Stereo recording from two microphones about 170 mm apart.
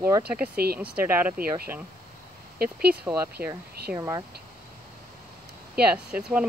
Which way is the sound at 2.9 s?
5° right (ahead or behind).